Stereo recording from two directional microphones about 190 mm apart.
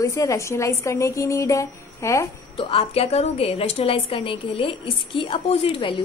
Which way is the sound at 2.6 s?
30° left (ahead or behind).